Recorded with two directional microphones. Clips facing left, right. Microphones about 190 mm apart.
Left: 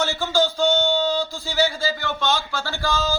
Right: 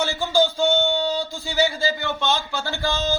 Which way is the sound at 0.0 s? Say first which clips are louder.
Right 1 dB; 15° right (ahead or behind).